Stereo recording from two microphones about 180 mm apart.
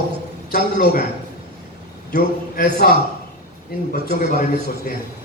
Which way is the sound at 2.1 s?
55° left (ahead or behind).